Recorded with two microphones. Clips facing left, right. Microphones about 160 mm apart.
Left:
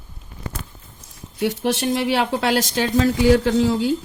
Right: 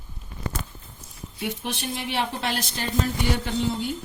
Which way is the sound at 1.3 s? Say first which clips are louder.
Left 10 dB; 90° left.